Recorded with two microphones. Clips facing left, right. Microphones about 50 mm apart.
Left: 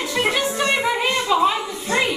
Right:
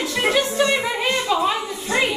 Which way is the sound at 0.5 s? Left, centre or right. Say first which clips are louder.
Right 2 dB; centre.